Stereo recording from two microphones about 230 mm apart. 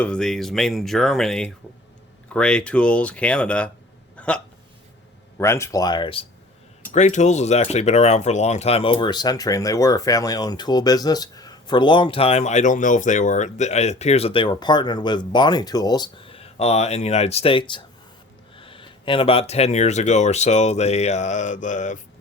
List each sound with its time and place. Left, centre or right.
0.0 s speech: centre
4.2 s hiccup: centre
5.4 s speech: centre; by 21.9 s left